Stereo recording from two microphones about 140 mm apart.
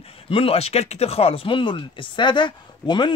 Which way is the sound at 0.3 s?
40° left (ahead or behind).